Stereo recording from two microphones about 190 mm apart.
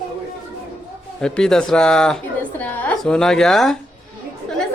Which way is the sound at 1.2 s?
5° left (ahead or behind).